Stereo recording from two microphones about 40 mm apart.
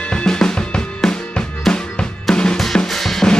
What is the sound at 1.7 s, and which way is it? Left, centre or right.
Drum, centre.